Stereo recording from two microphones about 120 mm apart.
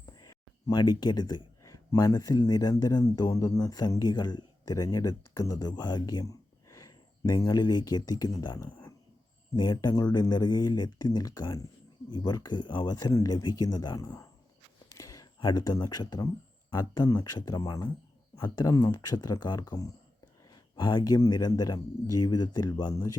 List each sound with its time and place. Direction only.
0.0 s speech: 30° left (ahead or behind)